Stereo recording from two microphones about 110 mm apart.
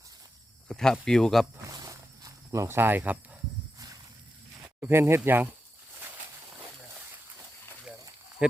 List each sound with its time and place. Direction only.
0.7 s speech: 5° left (ahead or behind)
1.7 s a sound: 35° right (ahead or behind); by 3.2 s 15° right (ahead or behind)
4.6 s speech: 20° right (ahead or behind)
8.4 s speech: 10° right (ahead or behind)